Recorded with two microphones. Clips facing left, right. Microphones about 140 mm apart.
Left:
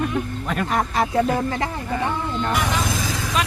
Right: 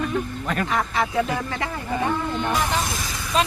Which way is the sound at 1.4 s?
30° left (ahead or behind).